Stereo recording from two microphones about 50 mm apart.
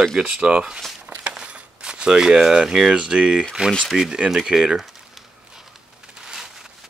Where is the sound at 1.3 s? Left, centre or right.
Centre.